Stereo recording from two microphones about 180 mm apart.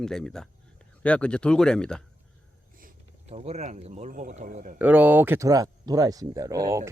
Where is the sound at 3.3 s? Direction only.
35° right (ahead or behind).